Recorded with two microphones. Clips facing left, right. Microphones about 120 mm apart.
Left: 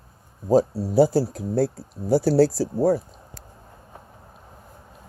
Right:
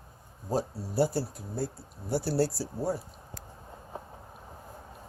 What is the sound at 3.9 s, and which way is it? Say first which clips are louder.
Vehicle: right 5 dB; 30° right (ahead or behind).